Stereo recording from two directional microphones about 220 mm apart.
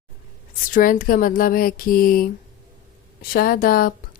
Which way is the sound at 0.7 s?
40° left (ahead or behind).